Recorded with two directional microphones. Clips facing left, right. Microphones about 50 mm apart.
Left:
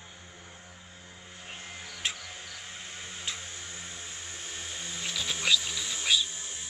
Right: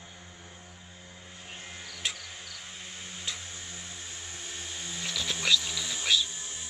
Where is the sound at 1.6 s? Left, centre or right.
Centre.